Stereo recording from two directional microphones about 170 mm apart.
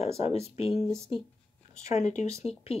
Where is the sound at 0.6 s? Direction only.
40° left (ahead or behind).